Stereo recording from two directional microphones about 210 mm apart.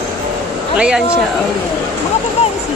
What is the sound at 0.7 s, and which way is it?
Speech, 5° right (ahead or behind).